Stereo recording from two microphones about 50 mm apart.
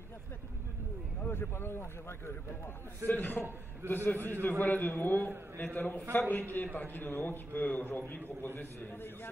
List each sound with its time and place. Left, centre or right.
1.3 s speech: left
3.1 s a man's voice: left